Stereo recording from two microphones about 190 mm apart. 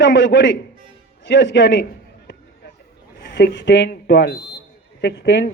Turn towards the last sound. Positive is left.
turn(degrees=60)  # may be behind; listen again after turning